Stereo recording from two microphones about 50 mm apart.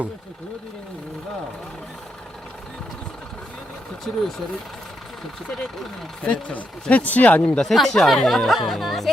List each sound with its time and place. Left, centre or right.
4.1 s speech: centre
5.5 s speech: centre
6.2 s speech: left
7.6 s speech: centre